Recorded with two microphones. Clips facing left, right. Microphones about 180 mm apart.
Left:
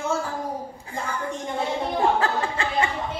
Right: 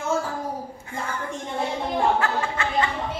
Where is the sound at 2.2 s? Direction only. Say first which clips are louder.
Even; 30° left (ahead or behind).